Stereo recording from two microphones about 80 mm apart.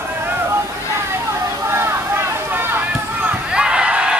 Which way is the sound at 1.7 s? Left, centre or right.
Right.